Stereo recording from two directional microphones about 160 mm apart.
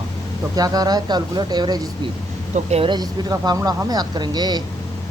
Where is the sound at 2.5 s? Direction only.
45° right (ahead or behind).